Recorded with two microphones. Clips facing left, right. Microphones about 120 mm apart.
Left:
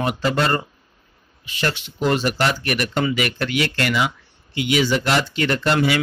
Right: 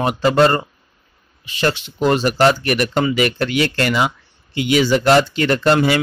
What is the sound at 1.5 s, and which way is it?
Speech, 30° right (ahead or behind).